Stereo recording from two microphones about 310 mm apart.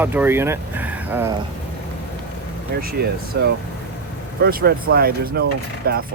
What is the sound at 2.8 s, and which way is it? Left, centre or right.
Speech, right.